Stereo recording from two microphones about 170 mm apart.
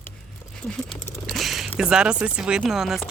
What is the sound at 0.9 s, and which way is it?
Mechanisms, centre (ahead or behind).